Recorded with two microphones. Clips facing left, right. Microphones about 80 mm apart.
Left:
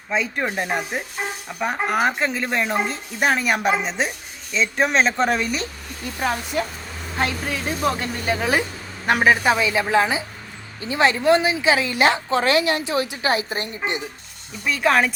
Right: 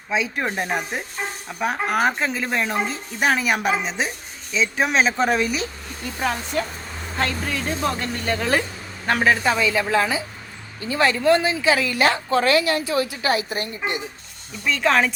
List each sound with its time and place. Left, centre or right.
0.1 s a woman's voice: centre
6.1 s a woman's voice: centre; by 14.0 s left
14.6 s a woman's voice: centre